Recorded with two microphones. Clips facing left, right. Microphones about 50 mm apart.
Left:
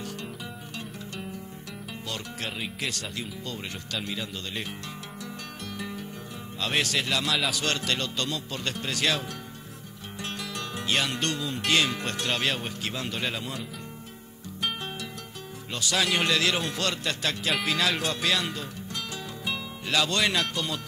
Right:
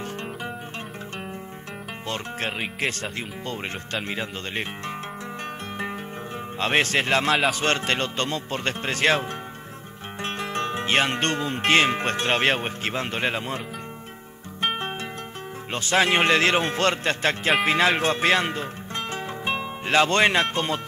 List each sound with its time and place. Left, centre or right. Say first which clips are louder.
2.0 s speech: right 6 dB; right
5.8 s music: right 5 dB; right
6.6 s speech: right 6 dB; right
10.2 s speech: right 8 dB; right
14.6 s music: right 6 dB; right
15.7 s speech: right 6 dB; right